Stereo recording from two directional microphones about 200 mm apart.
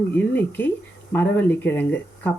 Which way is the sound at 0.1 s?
10° left (ahead or behind).